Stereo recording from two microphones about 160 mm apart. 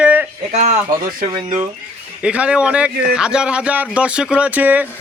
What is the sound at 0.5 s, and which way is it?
Speech, 45° right (ahead or behind).